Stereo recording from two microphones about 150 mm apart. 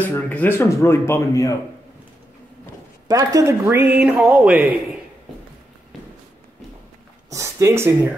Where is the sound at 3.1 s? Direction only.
20° right (ahead or behind); by 4.8 s 5° right (ahead or behind).